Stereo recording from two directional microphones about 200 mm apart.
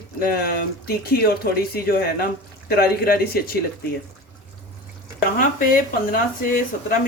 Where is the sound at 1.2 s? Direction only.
50° left (ahead or behind).